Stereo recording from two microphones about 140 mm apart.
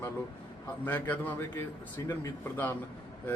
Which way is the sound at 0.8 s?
15° left (ahead or behind).